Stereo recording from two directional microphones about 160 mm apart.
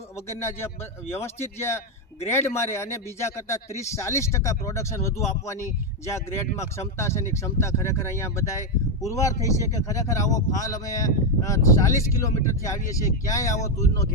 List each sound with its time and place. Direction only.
0.3 s a man's voice: 15° left (ahead or behind)